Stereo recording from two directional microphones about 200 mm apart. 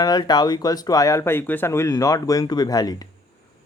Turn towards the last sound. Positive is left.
turn(degrees=20)  # may be behind; listen again after turning